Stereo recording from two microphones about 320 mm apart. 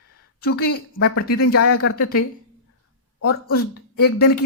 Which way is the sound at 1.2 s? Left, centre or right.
Left.